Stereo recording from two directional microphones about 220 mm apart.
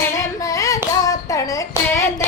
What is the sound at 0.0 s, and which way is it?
Child singing, 15° left (ahead or behind).